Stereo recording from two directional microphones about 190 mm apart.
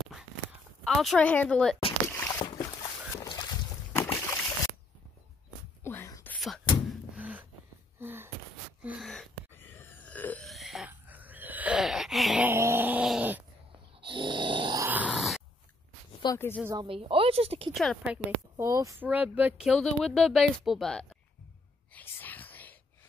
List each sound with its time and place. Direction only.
0.8 s speech: centre (ahead or behind)
2.0 s boat: 15° left (ahead or behind)
5.9 s whispering: 15° left (ahead or behind)
6.4 s a sound: centre (ahead or behind)
8.0 s gasp: 10° right (ahead or behind)
9.1 s burping: 5° left (ahead or behind)
14.0 s grunt: 25° right (ahead or behind)
14.9 s grunt: 5° right (ahead or behind)
16.1 s a sound: 25° left (ahead or behind)
16.3 s a woman's voice: 10° left (ahead or behind)
16.8 s speech: 30° right (ahead or behind)
17.7 s speech: 5° right (ahead or behind)
21.9 s whispering: 10° left (ahead or behind)